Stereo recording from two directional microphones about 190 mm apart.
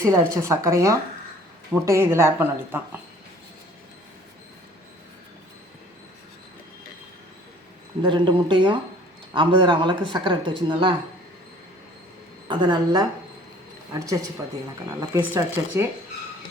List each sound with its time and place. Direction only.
0.0 s speech: 15° right (ahead or behind)
8.0 s speech: 25° right (ahead or behind)
12.5 s speech: 25° right (ahead or behind)